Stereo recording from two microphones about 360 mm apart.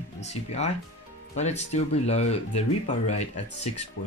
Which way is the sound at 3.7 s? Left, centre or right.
Left.